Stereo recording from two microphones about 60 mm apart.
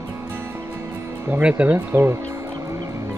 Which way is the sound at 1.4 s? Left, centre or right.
Right.